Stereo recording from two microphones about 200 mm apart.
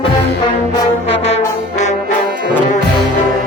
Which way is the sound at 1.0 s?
30° left (ahead or behind).